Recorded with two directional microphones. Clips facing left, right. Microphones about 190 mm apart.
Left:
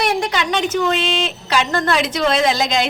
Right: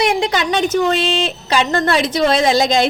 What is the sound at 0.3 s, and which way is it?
A woman's voice, 40° right (ahead or behind).